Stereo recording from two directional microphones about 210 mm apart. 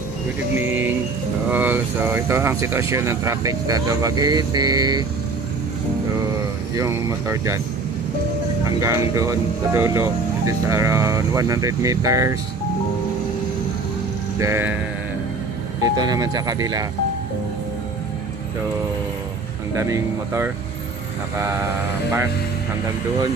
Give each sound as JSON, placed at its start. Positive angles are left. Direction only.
{"t": 0.6, "sound": "speech", "side_deg": -10}
{"t": 6.8, "sound": "speech", "side_deg": -15}
{"t": 8.7, "sound": "speech", "side_deg": -15}
{"t": 14.4, "sound": "speech", "side_deg": -10}
{"t": 15.8, "sound": "speech", "side_deg": -20}
{"t": 19.7, "sound": "speech", "side_deg": -15}